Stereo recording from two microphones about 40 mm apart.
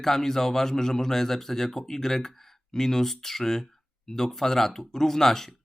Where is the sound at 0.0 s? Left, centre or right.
Centre.